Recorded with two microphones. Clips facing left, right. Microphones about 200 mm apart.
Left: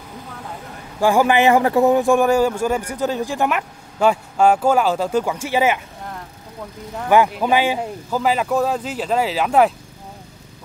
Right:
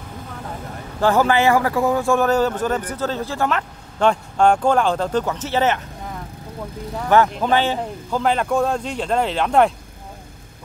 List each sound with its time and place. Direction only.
1.0 s a man's voice: 15° left (ahead or behind)
7.0 s speech: 10° left (ahead or behind)